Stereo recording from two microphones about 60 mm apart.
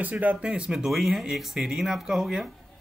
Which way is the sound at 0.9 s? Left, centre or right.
Centre.